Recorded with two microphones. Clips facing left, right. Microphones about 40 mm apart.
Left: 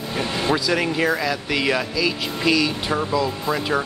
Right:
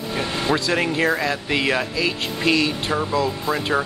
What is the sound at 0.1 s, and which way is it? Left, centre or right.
Speech, centre.